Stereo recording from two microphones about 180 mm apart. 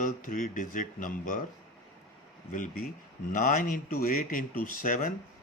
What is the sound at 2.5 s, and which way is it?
Speech, 45° left (ahead or behind).